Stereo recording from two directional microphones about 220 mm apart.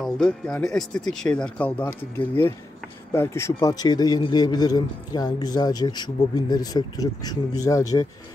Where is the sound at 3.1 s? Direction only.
10° left (ahead or behind).